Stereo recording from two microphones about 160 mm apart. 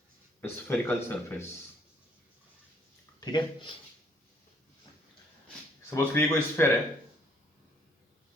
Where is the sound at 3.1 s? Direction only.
30° left (ahead or behind).